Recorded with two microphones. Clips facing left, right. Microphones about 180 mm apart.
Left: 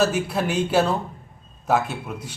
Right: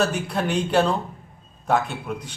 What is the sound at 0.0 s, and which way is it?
Speech, 5° left (ahead or behind).